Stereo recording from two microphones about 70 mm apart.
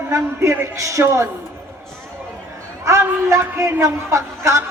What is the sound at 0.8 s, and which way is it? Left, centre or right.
Speech, right.